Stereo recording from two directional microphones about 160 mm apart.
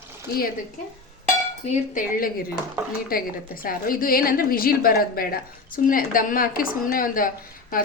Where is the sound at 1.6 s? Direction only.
50° left (ahead or behind).